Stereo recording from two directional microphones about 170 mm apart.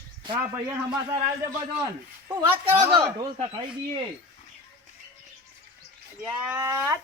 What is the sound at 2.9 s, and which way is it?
Speech, 30° right (ahead or behind).